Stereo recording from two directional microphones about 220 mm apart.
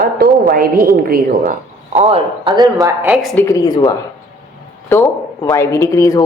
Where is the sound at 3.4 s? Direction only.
15° left (ahead or behind).